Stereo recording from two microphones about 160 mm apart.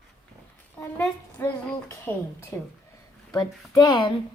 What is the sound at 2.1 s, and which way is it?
A woman's voice, 10° left (ahead or behind).